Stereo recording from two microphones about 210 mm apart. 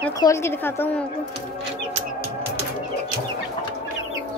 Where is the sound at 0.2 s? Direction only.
15° left (ahead or behind).